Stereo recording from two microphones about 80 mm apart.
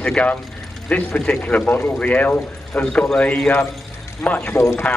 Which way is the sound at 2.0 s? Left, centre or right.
Centre.